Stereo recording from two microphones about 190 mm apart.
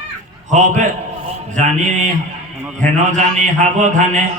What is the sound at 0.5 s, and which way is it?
Mantra, 40° right (ahead or behind).